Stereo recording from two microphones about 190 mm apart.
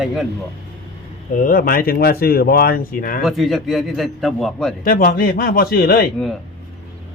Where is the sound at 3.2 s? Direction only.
Centre (ahead or behind).